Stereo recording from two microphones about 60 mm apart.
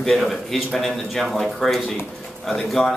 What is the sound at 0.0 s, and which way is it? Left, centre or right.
Speech, centre.